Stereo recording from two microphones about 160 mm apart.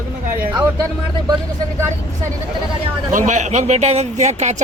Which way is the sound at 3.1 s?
50° right (ahead or behind).